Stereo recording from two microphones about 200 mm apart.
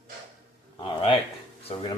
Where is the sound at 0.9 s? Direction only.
25° left (ahead or behind).